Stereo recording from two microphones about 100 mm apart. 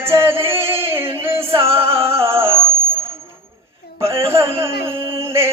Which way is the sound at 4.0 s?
25° right (ahead or behind).